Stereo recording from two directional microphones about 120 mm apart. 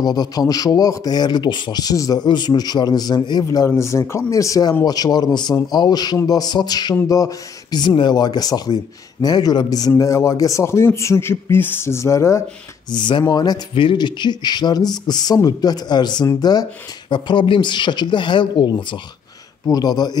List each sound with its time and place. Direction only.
0.0 s a man's voice: 35° left (ahead or behind)
12.9 s speech: 40° left (ahead or behind)
17.1 s speech: 45° left (ahead or behind)